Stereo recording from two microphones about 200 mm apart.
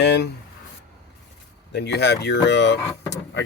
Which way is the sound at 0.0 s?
60° left (ahead or behind).